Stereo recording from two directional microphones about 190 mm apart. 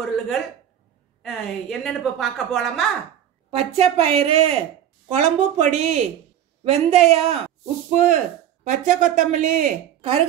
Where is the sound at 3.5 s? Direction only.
30° right (ahead or behind).